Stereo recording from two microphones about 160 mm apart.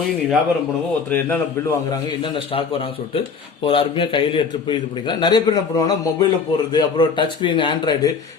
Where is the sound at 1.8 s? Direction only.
30° left (ahead or behind).